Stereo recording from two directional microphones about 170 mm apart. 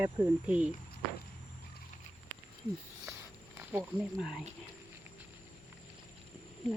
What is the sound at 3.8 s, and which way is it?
Speech, centre (ahead or behind).